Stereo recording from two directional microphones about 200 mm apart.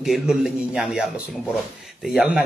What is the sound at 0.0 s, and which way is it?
A man's voice, centre (ahead or behind).